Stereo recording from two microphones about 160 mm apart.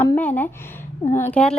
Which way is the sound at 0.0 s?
10° left (ahead or behind).